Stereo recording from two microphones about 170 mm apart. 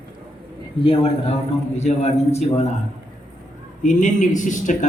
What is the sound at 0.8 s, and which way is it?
A man's voice, 30° left (ahead or behind).